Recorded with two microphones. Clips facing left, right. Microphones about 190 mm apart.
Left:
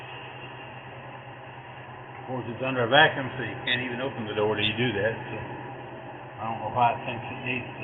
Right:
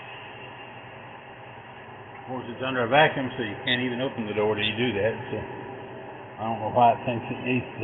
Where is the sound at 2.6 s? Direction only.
Centre (ahead or behind).